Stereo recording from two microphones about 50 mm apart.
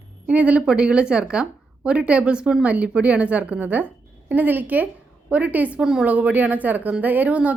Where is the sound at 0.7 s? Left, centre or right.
Centre.